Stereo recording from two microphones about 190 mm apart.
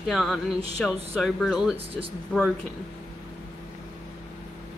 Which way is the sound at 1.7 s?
30° right (ahead or behind).